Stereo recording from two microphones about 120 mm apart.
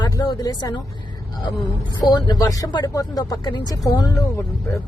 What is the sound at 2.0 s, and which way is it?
Speech, 35° left (ahead or behind).